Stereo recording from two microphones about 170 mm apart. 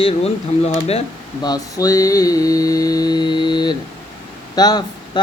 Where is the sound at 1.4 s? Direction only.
20° left (ahead or behind).